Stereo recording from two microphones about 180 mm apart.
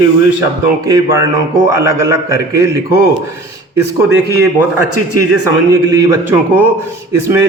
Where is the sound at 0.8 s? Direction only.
20° right (ahead or behind).